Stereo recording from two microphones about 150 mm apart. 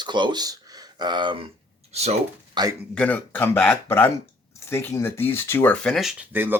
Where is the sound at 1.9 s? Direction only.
45° right (ahead or behind).